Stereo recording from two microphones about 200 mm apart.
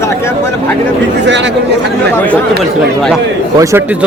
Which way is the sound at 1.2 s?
60° right (ahead or behind).